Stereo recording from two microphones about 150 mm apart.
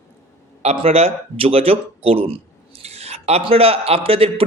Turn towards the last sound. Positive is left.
turn(degrees=-40)  # may be behind; listen again after turning